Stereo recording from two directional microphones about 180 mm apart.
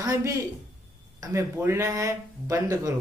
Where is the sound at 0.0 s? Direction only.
20° right (ahead or behind).